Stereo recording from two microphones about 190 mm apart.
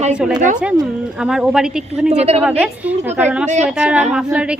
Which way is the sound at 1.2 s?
5° right (ahead or behind).